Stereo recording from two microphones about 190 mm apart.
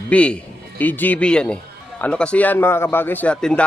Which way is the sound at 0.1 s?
5° left (ahead or behind).